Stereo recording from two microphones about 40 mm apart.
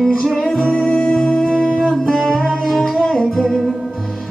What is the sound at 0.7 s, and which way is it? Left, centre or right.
Music, centre.